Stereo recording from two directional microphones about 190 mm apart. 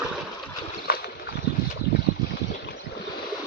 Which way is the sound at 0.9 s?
50° left (ahead or behind).